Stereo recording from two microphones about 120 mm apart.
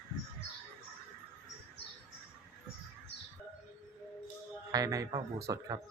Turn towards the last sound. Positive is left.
turn(degrees=-30)  # may be behind; listen again after turning